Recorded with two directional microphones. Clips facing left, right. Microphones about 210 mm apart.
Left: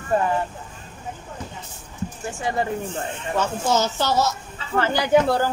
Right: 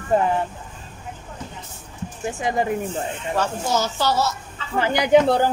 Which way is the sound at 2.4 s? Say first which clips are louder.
Right 2 dB; 15° right (ahead or behind).